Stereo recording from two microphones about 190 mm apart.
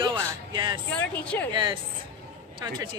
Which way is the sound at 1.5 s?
25° right (ahead or behind).